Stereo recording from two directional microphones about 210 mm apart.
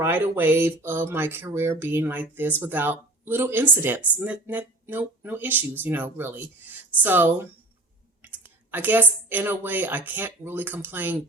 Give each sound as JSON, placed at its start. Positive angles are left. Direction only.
{"t": 0.0, "sound": "speech", "side_deg": -10}
{"t": 8.2, "sound": "a sound", "side_deg": -10}
{"t": 9.3, "sound": "speech", "side_deg": -10}